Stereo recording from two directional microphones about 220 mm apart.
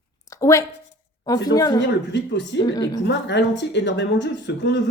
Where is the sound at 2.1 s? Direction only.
50° left (ahead or behind).